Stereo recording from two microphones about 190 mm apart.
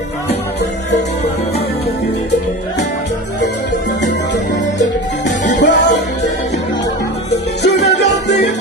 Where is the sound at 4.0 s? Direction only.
65° left (ahead or behind).